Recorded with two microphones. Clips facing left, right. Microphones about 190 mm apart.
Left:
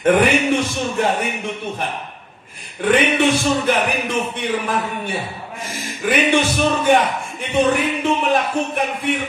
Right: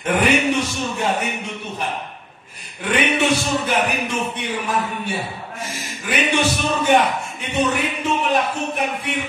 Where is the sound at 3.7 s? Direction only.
55° left (ahead or behind).